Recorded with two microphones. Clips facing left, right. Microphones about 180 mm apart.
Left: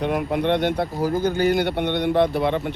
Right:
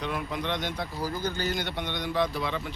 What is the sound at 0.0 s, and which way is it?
Speech, 55° left (ahead or behind).